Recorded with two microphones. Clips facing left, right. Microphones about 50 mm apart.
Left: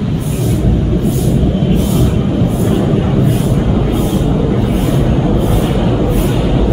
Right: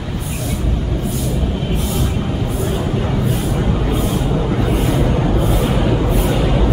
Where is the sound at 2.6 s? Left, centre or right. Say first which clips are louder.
Left 7 dB; centre.